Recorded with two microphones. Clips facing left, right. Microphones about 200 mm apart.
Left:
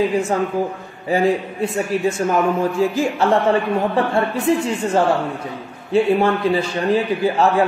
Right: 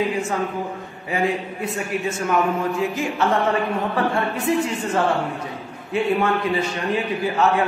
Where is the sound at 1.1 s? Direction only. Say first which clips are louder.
Left 5 dB; 30° left (ahead or behind).